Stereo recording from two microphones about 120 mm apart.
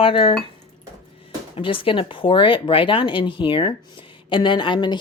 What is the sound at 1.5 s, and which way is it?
A woman's voice, 45° left (ahead or behind).